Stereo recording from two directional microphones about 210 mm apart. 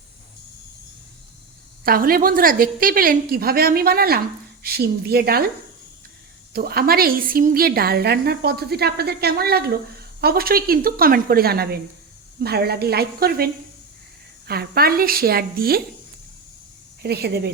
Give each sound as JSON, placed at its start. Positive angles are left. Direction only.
{"t": 1.8, "sound": "a woman's voice", "side_deg": -45}
{"t": 6.5, "sound": "a woman's voice", "side_deg": -45}
{"t": 17.0, "sound": "a woman's voice", "side_deg": -50}